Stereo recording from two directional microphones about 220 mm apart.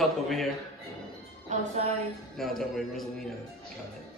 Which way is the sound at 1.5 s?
30° right (ahead or behind).